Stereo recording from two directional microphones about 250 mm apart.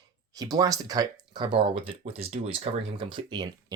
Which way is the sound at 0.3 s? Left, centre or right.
Centre.